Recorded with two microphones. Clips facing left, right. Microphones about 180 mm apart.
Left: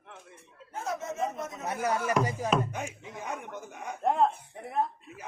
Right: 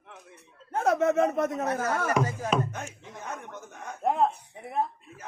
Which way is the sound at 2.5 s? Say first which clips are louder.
Even; 10° left (ahead or behind).